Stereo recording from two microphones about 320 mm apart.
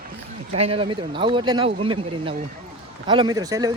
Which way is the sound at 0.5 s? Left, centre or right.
Centre.